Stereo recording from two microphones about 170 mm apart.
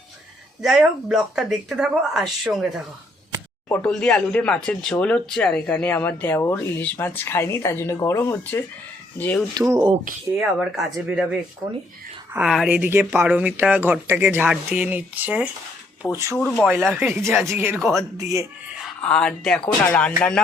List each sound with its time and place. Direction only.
0.6 s speech: centre (ahead or behind)
10.3 s speech: 5° right (ahead or behind)
16.4 s speech: 5° left (ahead or behind)
16.9 s speech: 10° right (ahead or behind)
17.7 s speech: centre (ahead or behind)
18.2 s a man's voice: 20° right (ahead or behind)
19.0 s speech: 5° left (ahead or behind)